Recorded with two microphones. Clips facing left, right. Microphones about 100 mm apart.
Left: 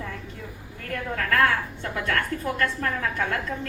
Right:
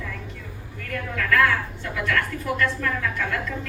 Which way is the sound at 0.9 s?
35° left (ahead or behind).